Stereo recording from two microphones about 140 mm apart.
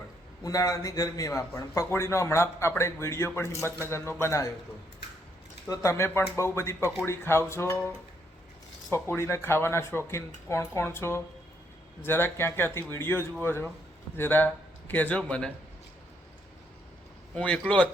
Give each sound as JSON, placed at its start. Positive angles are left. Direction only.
{"t": 0.4, "sound": "a man's voice", "side_deg": 25}
{"t": 5.6, "sound": "a man's voice", "side_deg": 20}
{"t": 8.9, "sound": "a man's voice", "side_deg": 20}
{"t": 17.3, "sound": "a man's voice", "side_deg": 5}